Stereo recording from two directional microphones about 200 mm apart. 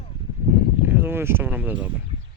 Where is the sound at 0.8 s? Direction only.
10° right (ahead or behind).